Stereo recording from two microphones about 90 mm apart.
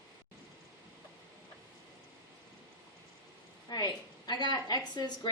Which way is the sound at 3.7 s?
50° left (ahead or behind).